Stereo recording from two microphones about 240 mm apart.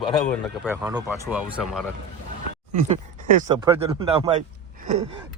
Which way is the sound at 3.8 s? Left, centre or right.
Right.